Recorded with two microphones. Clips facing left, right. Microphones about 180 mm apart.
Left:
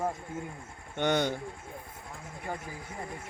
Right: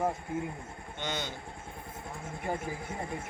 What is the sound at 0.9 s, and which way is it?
Speech, 60° left (ahead or behind).